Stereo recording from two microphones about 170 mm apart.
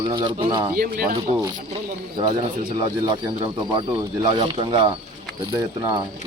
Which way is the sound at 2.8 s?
25° right (ahead or behind).